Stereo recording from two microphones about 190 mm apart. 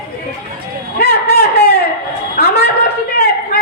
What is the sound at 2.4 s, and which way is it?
Speech, 55° left (ahead or behind).